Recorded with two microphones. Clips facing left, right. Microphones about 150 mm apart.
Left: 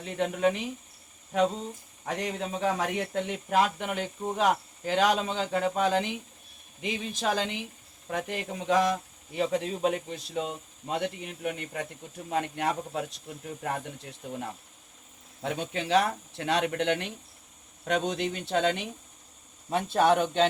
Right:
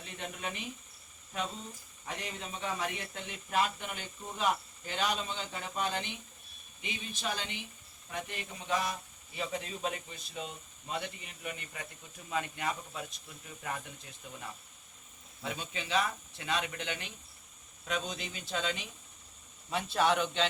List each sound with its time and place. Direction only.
0.0 s speech: 75° left (ahead or behind)
1.3 s speech: 70° left (ahead or behind)
2.0 s speech: 90° left
13.2 s speech: 55° left (ahead or behind); by 14.2 s 70° left (ahead or behind)
14.2 s speech: 55° left (ahead or behind)
15.4 s speech: 70° left (ahead or behind)
19.7 s speech: 50° left (ahead or behind)